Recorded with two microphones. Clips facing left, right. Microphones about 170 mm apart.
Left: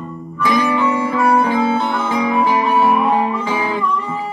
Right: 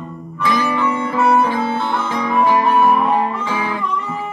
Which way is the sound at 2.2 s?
15° left (ahead or behind).